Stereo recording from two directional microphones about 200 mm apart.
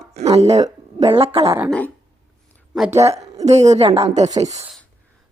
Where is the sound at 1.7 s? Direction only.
5° left (ahead or behind).